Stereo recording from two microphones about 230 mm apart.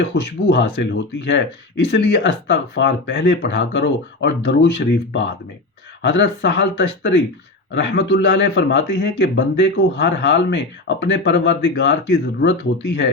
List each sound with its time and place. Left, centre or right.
0.0 s a man's voice: left